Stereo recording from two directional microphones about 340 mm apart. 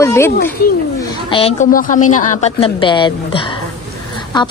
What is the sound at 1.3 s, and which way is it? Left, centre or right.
A woman's voice, centre.